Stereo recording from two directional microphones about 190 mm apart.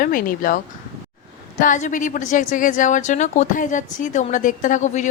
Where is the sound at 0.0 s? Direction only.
45° left (ahead or behind).